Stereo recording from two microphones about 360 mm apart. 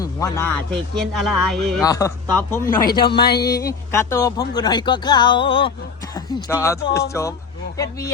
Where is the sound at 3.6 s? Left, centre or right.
Centre.